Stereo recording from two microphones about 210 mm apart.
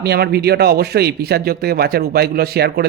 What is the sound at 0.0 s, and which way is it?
Speech, 50° right (ahead or behind).